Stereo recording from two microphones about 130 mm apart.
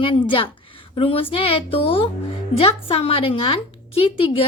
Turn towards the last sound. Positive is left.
turn(degrees=45)  # may be behind; listen again after turning